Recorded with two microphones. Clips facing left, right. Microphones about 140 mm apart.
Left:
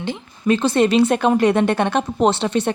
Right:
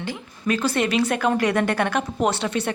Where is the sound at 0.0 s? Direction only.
25° left (ahead or behind).